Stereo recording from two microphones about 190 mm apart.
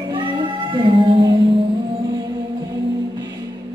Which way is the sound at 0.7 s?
25° right (ahead or behind).